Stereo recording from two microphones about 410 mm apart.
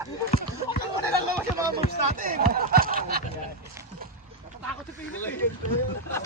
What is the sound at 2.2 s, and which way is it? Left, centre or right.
Speech, centre.